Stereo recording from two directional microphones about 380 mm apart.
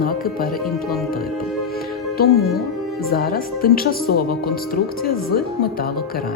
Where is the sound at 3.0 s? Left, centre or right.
Left.